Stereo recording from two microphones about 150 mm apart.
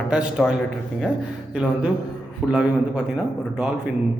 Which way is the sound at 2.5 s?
5° right (ahead or behind).